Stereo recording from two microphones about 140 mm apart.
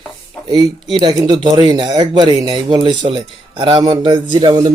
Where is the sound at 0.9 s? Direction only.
30° right (ahead or behind).